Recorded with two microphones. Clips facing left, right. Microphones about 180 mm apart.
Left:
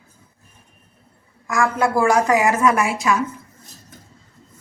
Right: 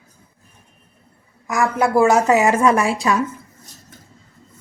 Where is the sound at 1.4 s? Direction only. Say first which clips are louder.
Right 1 dB; 20° right (ahead or behind).